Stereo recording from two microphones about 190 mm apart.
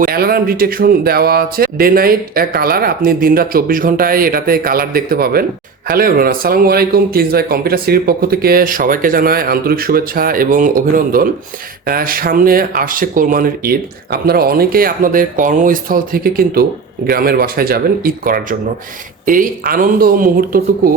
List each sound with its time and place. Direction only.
0.0 s speech: 50° right (ahead or behind)